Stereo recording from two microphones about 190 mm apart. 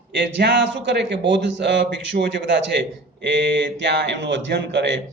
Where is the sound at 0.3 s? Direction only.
65° right (ahead or behind).